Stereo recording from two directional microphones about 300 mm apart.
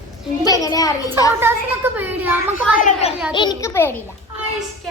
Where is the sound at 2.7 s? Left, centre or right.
Left.